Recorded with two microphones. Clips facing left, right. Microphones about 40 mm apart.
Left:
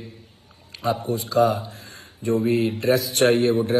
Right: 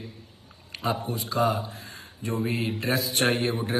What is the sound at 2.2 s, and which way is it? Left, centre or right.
Speech, right.